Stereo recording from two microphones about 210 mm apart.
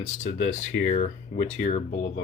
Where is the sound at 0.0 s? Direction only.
30° left (ahead or behind).